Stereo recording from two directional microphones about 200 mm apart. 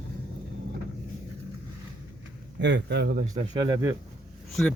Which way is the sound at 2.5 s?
60° right (ahead or behind).